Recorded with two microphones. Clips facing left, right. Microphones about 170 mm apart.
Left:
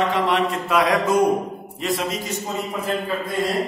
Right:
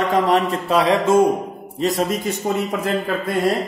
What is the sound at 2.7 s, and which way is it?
Speech, 80° right.